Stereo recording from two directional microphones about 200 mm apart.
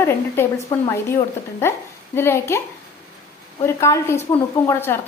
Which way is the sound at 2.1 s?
10° left (ahead or behind).